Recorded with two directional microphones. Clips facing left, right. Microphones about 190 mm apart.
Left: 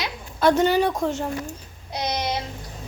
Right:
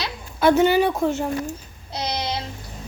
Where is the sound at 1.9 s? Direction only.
15° left (ahead or behind).